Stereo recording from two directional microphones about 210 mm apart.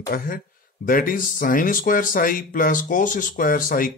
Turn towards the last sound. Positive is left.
turn(degrees=40)  # may be behind; listen again after turning